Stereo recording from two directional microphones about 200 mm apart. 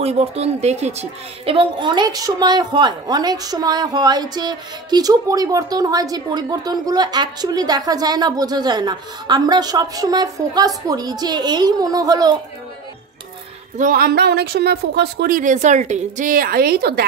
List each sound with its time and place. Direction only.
0.0 s speech: 30° right (ahead or behind)
13.7 s speech: 45° right (ahead or behind)